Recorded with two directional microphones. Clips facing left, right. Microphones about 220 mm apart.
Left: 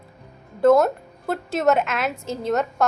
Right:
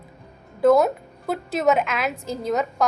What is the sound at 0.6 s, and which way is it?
A woman's voice, 5° right (ahead or behind).